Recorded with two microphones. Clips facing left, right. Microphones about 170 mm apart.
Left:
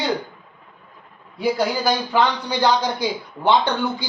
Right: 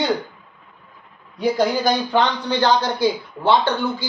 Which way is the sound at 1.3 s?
5° left (ahead or behind).